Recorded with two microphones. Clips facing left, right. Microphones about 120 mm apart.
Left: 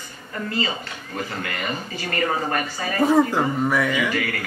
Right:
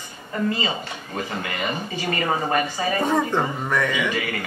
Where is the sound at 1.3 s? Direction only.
15° right (ahead or behind).